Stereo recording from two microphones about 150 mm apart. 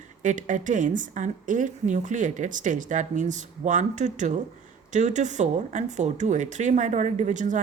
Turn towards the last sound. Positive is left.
turn(degrees=-55)  # may be behind; listen again after turning